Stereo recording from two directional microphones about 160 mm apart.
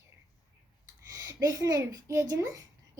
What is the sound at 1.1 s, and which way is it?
A woman's voice, 20° right (ahead or behind).